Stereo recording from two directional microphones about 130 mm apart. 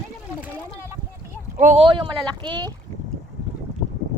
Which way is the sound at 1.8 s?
40° right (ahead or behind).